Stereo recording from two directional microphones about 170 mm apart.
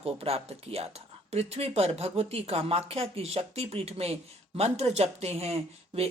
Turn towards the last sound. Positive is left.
turn(degrees=-35)  # may be behind; listen again after turning